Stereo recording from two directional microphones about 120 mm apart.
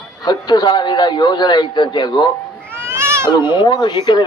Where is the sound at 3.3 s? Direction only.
40° left (ahead or behind).